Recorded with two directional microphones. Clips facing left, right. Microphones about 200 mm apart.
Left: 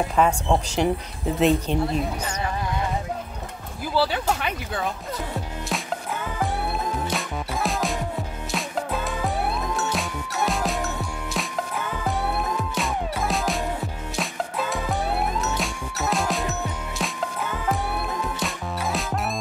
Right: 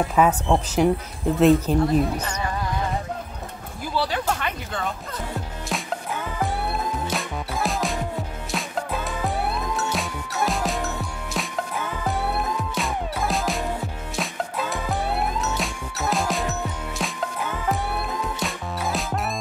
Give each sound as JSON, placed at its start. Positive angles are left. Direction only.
{"t": 0.1, "sound": "speech", "side_deg": -5}
{"t": 3.9, "sound": "speech", "side_deg": 5}
{"t": 7.1, "sound": "music", "side_deg": 0}
{"t": 12.3, "sound": "music", "side_deg": 0}